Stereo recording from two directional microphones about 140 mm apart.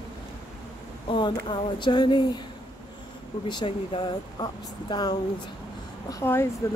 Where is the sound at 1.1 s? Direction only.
35° left (ahead or behind).